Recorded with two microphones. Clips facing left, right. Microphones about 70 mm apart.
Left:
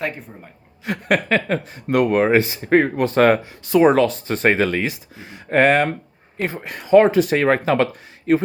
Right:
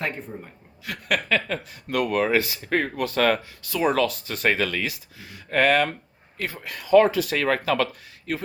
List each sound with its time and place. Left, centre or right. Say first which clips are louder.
0.0 s a woman's voice: left 3 dB; centre
0.9 s speech: left 6 dB; left